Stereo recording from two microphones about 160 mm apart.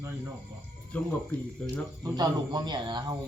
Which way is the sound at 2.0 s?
25° right (ahead or behind).